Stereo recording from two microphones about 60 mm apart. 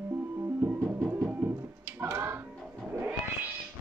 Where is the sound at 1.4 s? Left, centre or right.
Right.